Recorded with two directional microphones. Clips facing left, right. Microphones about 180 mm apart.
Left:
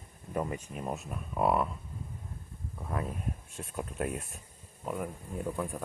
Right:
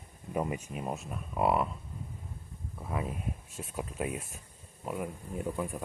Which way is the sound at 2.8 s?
5° right (ahead or behind).